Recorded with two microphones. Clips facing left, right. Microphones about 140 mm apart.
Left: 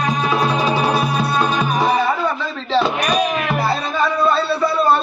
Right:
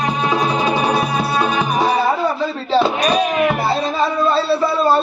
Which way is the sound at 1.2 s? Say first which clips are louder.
Even; 10° right (ahead or behind).